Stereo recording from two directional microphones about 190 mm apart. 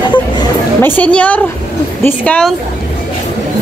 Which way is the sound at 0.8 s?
10° left (ahead or behind).